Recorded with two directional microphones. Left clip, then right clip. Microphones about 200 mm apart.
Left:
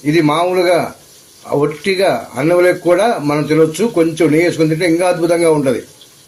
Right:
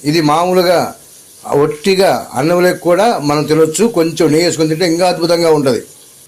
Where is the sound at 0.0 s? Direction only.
35° right (ahead or behind).